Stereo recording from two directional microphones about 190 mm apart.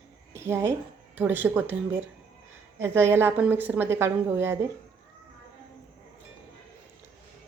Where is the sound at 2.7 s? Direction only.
10° right (ahead or behind).